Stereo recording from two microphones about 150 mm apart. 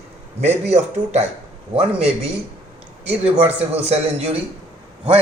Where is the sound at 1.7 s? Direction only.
40° right (ahead or behind).